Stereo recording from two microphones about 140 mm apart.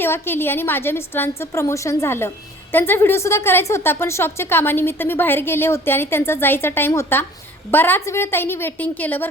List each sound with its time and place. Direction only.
0.0 s a woman's voice: 15° left (ahead or behind)